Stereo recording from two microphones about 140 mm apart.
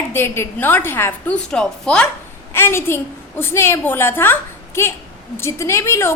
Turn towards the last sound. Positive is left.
turn(degrees=20)  # may be behind; listen again after turning